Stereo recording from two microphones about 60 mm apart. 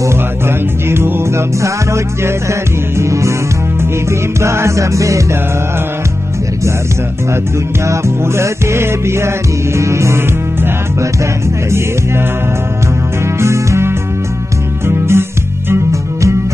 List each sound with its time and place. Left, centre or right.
0.8 s music: right
3.0 s music: right
4.4 s music: right
7.8 s music: right
13.4 s music: right
15.7 s music: right